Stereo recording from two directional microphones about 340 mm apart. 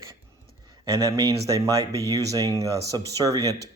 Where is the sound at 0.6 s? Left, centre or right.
Centre.